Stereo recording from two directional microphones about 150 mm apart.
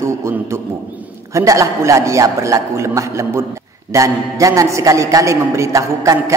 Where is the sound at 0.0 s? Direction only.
20° right (ahead or behind).